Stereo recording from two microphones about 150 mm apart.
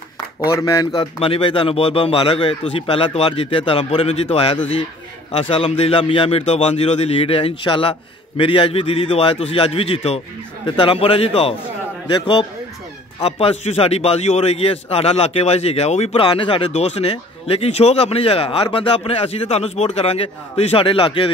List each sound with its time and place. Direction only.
0.4 s speech: 20° left (ahead or behind)
1.2 s a man's voice: 35° left (ahead or behind)
16.7 s speech: 45° left (ahead or behind)